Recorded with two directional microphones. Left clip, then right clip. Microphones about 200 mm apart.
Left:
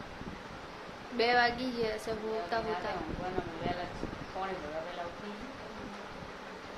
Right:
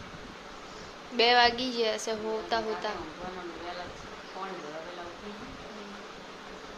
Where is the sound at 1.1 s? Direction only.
10° right (ahead or behind).